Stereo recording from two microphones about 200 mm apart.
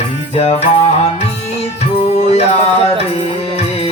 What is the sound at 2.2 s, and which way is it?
Music, 30° left (ahead or behind).